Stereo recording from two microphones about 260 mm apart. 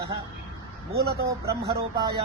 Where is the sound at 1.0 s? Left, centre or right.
Right.